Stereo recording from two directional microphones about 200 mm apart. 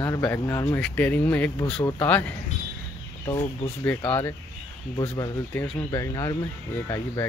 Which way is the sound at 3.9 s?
10° left (ahead or behind).